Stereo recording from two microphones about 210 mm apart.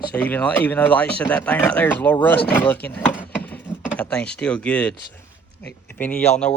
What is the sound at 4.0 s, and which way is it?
Speech, 5° left (ahead or behind).